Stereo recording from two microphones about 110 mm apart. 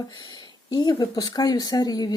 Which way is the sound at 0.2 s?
40° left (ahead or behind).